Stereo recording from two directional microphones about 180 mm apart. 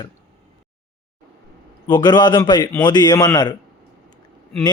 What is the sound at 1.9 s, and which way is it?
A man's voice, 25° left (ahead or behind).